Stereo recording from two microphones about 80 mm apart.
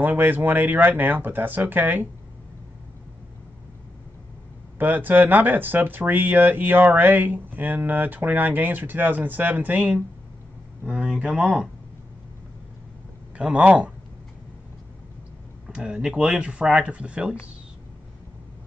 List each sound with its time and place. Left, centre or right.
0.0 s speech: right
4.7 s speech: right; by 11.7 s centre
13.4 s speech: centre
15.7 s speech: centre